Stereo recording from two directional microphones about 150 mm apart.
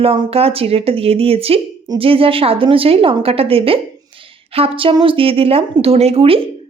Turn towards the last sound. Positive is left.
turn(degrees=-40)  # may be behind; listen again after turning